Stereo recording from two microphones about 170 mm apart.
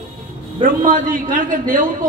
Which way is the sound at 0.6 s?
50° right (ahead or behind).